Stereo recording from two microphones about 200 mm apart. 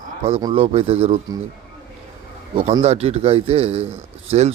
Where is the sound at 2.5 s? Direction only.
30° right (ahead or behind).